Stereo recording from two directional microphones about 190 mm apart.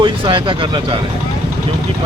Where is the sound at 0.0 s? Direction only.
25° right (ahead or behind).